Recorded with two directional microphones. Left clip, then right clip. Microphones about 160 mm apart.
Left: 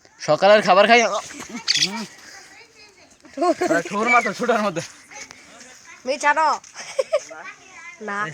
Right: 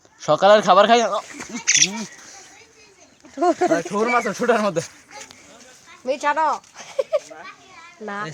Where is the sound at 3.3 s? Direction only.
60° left (ahead or behind).